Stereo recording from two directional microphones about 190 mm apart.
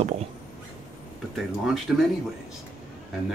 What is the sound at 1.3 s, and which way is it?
Speech, centre (ahead or behind).